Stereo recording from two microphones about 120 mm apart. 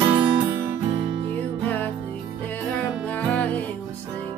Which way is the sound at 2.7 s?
10° left (ahead or behind).